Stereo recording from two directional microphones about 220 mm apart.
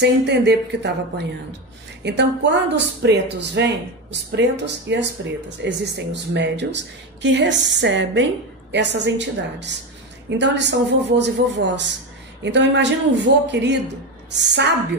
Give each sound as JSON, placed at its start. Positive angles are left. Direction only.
{"t": 0.0, "sound": "speech", "side_deg": -50}